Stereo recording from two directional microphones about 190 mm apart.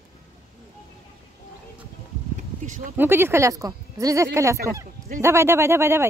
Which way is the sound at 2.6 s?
40° right (ahead or behind).